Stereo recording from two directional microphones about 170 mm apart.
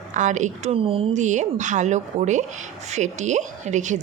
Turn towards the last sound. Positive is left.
turn(degrees=-45)  # may be behind; listen again after turning